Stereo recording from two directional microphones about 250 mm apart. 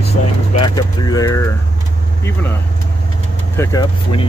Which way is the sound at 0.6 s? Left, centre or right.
Centre.